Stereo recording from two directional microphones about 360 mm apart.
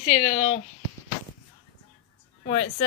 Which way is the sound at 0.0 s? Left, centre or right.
Centre.